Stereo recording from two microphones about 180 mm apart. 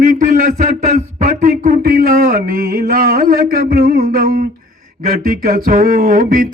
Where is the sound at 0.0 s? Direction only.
45° right (ahead or behind).